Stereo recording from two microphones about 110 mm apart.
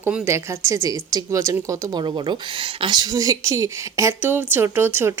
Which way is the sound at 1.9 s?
45° right (ahead or behind).